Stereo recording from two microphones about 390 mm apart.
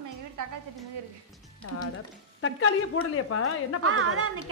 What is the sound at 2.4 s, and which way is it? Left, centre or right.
Speech, left.